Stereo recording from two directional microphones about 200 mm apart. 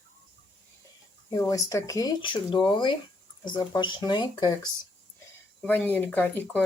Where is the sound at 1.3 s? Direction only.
15° left (ahead or behind).